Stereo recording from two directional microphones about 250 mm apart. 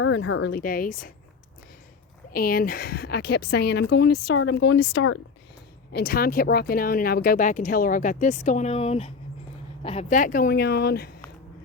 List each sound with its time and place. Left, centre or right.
0.0 s speech: left
2.3 s speech: left
4.2 s speech: left
4.4 s speech: left